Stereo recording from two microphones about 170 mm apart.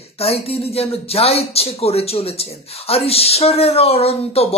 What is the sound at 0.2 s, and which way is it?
Speech, 35° left (ahead or behind).